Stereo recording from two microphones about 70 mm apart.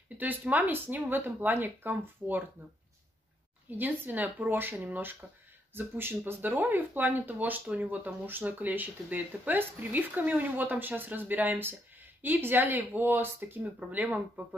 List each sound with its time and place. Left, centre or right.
0.2 s speech: right
3.7 s speech: right
13.9 s speech: centre